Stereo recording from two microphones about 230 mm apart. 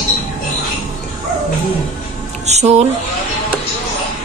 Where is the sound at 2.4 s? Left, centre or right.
Right.